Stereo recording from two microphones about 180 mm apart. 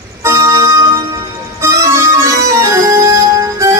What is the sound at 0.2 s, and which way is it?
Music, 15° right (ahead or behind).